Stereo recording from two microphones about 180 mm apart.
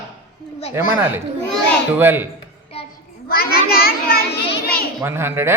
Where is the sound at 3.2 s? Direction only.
55° left (ahead or behind).